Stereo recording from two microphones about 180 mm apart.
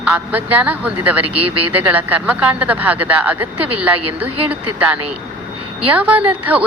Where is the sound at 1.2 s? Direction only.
30° right (ahead or behind).